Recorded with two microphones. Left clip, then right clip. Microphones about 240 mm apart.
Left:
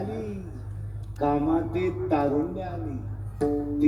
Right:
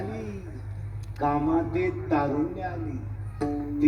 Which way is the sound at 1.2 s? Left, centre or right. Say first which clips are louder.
Even; left.